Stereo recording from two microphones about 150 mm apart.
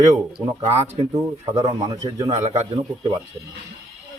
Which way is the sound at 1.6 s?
30° right (ahead or behind).